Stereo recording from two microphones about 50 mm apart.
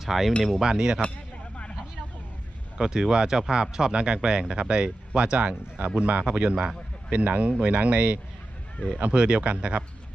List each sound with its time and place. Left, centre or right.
0.0 s speech: centre
2.8 s speech: centre